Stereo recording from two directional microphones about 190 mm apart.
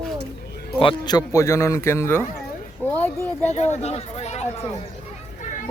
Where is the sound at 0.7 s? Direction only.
25° left (ahead or behind).